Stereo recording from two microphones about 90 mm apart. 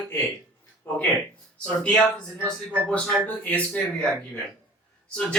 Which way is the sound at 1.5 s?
10° left (ahead or behind).